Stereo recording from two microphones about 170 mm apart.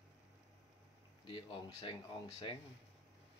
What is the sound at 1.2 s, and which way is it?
Speech, 30° left (ahead or behind).